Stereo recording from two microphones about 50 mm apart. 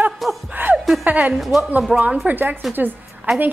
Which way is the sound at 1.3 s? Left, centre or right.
Centre.